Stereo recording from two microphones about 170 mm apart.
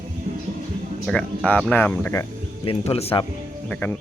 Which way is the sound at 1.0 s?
5° left (ahead or behind).